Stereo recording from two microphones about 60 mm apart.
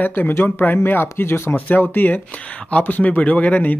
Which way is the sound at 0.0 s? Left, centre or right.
Left.